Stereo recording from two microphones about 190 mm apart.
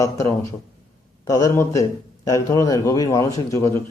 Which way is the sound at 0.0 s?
15° left (ahead or behind).